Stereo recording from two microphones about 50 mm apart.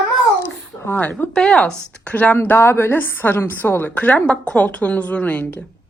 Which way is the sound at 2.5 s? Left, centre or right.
Left.